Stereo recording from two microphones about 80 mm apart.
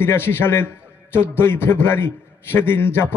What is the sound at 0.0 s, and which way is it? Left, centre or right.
A man's voice, left.